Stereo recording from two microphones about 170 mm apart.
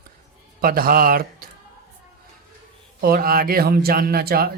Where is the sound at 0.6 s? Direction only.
60° right (ahead or behind).